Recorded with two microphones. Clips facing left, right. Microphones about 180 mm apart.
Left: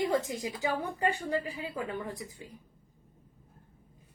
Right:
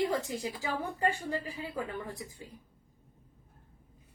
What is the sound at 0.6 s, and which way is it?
A woman's voice, 15° left (ahead or behind).